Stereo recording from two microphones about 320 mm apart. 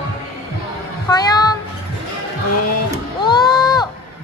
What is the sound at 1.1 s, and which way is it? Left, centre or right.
Music, centre.